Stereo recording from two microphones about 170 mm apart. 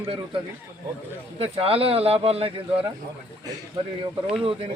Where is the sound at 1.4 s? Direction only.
35° right (ahead or behind).